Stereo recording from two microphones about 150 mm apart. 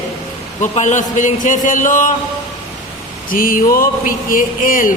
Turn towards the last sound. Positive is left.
turn(degrees=65)  # may be behind; listen again after turning